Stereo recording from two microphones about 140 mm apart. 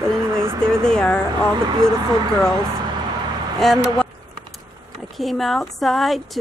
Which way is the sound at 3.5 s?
Centre (ahead or behind).